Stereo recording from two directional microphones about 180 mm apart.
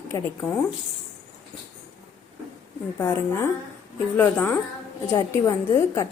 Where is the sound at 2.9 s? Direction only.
15° left (ahead or behind).